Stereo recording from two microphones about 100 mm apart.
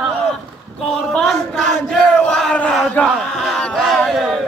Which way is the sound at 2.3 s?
10° left (ahead or behind).